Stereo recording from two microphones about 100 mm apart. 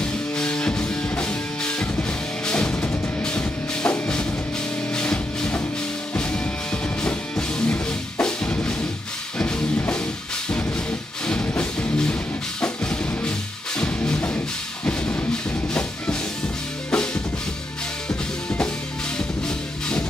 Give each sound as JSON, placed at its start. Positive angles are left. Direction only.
{"t": 0.0, "sound": "music", "side_deg": 10}
{"t": 11.4, "sound": "music", "side_deg": 15}
{"t": 16.9, "sound": "drum", "side_deg": 10}
{"t": 18.0, "sound": "music", "side_deg": 10}